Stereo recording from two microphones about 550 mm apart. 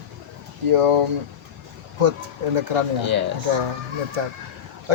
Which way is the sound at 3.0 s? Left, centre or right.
Right.